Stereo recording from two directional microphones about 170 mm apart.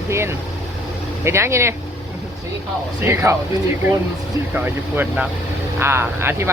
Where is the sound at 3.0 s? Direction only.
15° right (ahead or behind).